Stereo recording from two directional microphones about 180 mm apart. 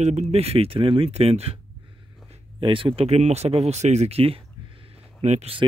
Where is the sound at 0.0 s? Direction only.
40° right (ahead or behind).